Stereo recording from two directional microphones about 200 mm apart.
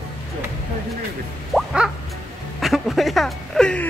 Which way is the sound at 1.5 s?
5° right (ahead or behind).